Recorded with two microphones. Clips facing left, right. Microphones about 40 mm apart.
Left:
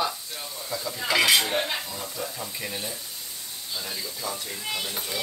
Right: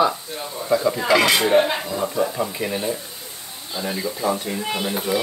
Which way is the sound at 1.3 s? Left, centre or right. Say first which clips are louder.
Right 7 dB; right.